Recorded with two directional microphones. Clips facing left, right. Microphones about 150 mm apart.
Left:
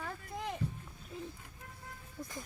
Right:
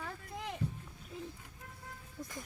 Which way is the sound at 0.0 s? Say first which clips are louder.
Left 2 dB; 45° left (ahead or behind).